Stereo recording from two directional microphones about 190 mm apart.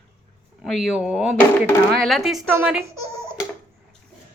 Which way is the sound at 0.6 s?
Centre (ahead or behind).